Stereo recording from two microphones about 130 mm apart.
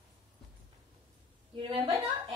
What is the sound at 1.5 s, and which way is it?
Speech, 45° right (ahead or behind).